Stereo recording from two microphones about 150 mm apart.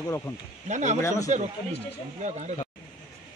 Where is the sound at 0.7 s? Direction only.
50° right (ahead or behind).